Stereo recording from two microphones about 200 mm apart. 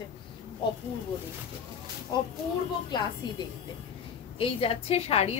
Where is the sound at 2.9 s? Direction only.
20° left (ahead or behind).